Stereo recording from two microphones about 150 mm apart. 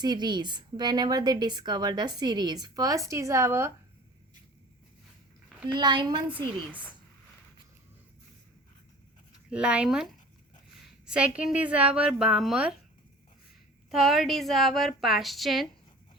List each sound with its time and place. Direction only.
0.0 s a woman's voice: 30° right (ahead or behind)
5.6 s a woman's voice: 30° right (ahead or behind)
6.7 s a woman's voice: 10° right (ahead or behind)
9.5 s a woman's voice: 5° right (ahead or behind)
13.9 s a woman's voice: centre (ahead or behind)